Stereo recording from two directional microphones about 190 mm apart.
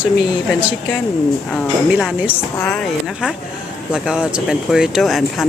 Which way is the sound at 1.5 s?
Centre (ahead or behind).